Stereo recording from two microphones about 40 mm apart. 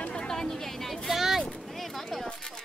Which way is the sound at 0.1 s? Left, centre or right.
Centre.